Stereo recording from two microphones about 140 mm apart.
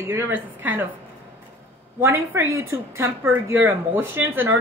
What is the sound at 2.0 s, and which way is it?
Speech, 15° right (ahead or behind).